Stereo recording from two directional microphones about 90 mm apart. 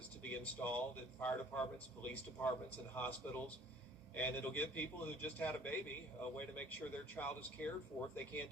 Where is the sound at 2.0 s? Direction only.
20° left (ahead or behind).